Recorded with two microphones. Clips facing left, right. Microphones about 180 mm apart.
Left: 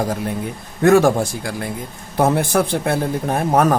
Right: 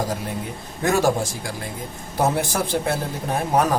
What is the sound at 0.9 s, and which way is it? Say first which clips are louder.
Speech: left 7 dB; 60° left (ahead or behind).